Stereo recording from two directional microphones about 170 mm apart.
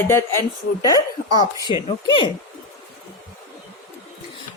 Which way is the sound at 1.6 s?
30° left (ahead or behind).